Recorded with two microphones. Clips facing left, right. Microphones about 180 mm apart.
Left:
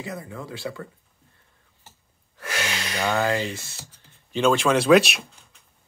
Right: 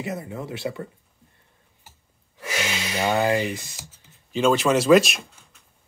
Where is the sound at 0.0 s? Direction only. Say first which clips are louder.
Right 3 dB; 25° right (ahead or behind).